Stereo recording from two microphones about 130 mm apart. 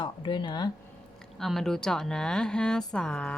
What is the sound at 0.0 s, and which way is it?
Speech, 40° left (ahead or behind).